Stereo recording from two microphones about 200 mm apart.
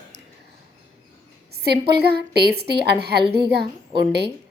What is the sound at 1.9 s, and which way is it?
A woman's voice, 55° right (ahead or behind).